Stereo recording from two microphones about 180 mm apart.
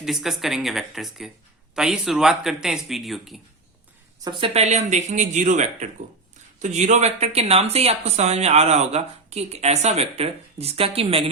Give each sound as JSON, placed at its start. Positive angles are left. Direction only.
{"t": 0.0, "sound": "speech", "side_deg": 0}
{"t": 4.2, "sound": "speech", "side_deg": -25}